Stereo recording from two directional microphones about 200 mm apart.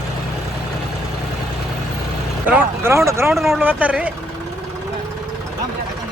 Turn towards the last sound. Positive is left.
turn(degrees=-5)  # may be behind; listen again after turning